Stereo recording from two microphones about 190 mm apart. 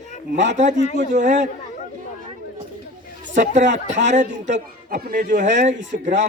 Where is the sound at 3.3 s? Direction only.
40° right (ahead or behind).